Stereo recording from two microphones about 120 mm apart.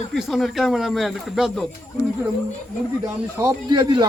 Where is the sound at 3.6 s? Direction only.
40° right (ahead or behind).